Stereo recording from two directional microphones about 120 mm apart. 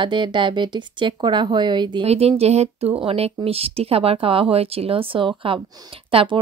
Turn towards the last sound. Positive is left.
turn(degrees=-50)  # may be behind; listen again after turning